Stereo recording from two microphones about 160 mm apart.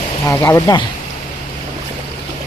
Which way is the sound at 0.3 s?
20° left (ahead or behind).